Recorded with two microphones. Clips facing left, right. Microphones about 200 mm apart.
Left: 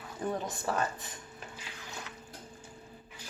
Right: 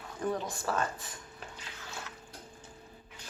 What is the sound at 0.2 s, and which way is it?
Speech, 20° left (ahead or behind).